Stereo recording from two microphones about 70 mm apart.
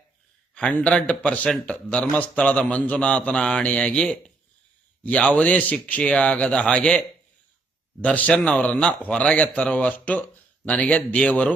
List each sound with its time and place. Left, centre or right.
0.5 s a man's voice: centre
8.0 s a man's voice: left